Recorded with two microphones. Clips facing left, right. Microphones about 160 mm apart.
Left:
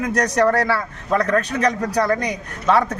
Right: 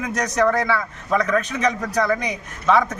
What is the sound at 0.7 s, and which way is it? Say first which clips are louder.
A man's voice: left 1 dB; centre (ahead or behind).